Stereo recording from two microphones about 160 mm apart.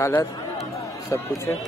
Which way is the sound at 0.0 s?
15° left (ahead or behind).